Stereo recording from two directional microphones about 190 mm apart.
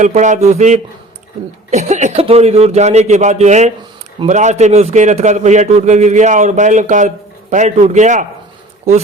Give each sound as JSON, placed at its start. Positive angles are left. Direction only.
{"t": 0.0, "sound": "a man's voice", "side_deg": -40}